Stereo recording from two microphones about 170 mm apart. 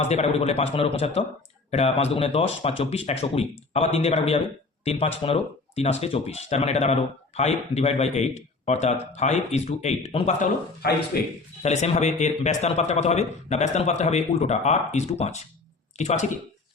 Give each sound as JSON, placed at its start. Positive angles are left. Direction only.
{"t": 0.0, "sound": "speech", "side_deg": 40}
{"t": 10.8, "sound": "speech", "side_deg": 65}
{"t": 11.6, "sound": "speech", "side_deg": 40}